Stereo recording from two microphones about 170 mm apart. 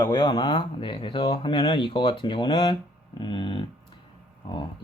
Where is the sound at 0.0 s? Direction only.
25° left (ahead or behind).